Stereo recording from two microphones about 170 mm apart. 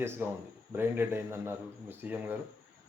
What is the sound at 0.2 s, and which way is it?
Speech, 15° right (ahead or behind).